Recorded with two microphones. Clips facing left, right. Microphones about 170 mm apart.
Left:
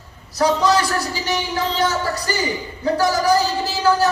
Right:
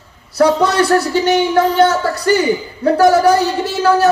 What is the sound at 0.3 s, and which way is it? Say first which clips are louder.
A man's voice: right 5 dB; 60° right (ahead or behind).